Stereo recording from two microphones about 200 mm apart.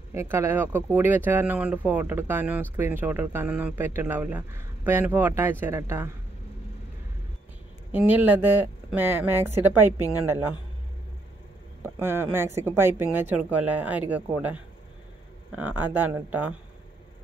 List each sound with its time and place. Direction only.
0.1 s speech: 15° right (ahead or behind)
7.9 s speech: 10° right (ahead or behind)
11.8 s speech: 10° right (ahead or behind)